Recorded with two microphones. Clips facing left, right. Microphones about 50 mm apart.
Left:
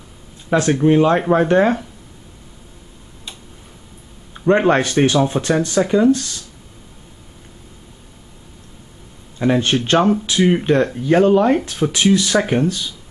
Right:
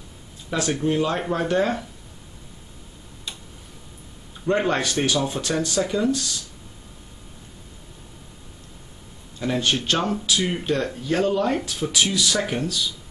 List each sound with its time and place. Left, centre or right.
0.5 s speech: left
4.3 s speech: left
9.4 s speech: left